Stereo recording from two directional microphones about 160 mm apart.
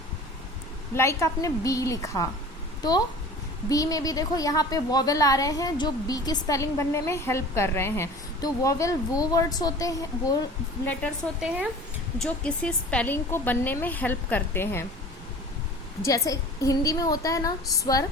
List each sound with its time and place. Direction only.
0.9 s a woman's voice: 15° left (ahead or behind)
3.7 s a woman's voice: 20° left (ahead or behind)
11.3 s speech: 5° right (ahead or behind)
12.2 s speech: 5° left (ahead or behind)
16.0 s a woman's voice: 20° left (ahead or behind)